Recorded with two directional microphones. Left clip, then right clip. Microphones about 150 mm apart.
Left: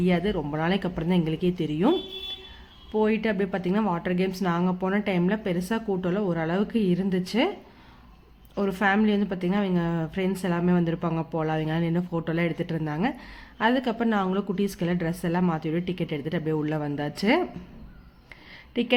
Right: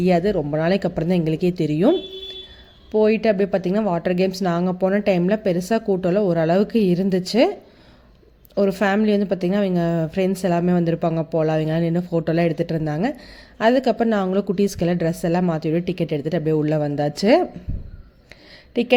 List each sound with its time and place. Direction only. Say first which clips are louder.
0.0 s speech: right 7 dB; 30° right (ahead or behind)
2.9 s speech: right 8 dB; 30° right (ahead or behind)
8.5 s speech: right 5 dB; 30° right (ahead or behind)
18.7 s speech: right 7 dB; 25° right (ahead or behind)